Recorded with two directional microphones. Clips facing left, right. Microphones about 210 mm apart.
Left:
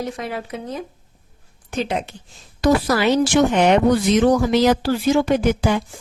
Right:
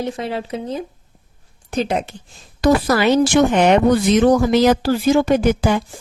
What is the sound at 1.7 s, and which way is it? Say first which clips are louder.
Speech: right 3 dB; 40° right (ahead or behind).